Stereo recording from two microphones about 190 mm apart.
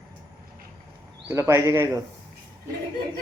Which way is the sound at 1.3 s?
15° right (ahead or behind).